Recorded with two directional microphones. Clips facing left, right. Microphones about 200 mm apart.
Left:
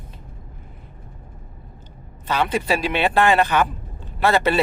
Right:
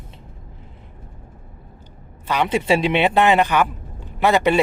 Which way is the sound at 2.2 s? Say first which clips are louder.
Right 2 dB; 15° right (ahead or behind).